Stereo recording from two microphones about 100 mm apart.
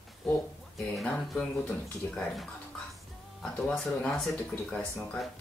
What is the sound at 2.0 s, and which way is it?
Speech, 25° left (ahead or behind).